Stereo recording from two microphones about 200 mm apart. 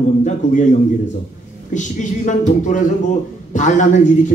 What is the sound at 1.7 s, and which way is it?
A man's voice, 40° left (ahead or behind).